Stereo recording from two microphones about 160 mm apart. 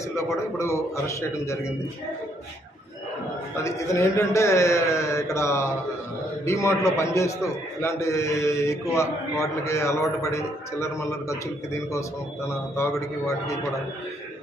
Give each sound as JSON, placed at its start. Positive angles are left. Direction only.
{"t": 0.6, "sound": "a man's voice", "side_deg": 15}
{"t": 3.5, "sound": "a man's voice", "side_deg": 20}